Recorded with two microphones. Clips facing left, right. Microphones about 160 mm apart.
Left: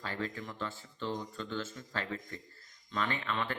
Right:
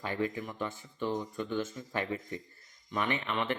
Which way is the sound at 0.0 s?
15° right (ahead or behind).